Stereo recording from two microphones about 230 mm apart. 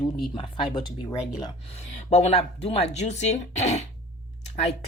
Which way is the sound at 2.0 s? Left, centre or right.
Left.